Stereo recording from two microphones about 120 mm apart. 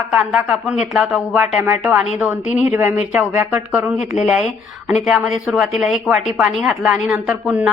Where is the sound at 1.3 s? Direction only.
15° right (ahead or behind).